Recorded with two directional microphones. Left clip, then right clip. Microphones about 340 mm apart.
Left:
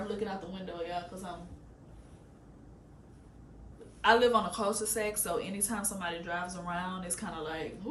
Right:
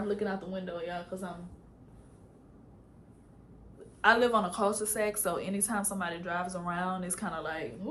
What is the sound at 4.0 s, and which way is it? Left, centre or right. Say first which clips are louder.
A woman's voice: even; centre.